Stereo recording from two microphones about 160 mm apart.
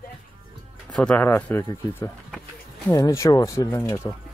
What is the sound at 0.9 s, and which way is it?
Speech, 10° left (ahead or behind).